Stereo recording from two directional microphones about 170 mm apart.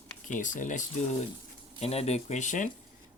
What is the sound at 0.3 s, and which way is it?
Speech, 50° left (ahead or behind).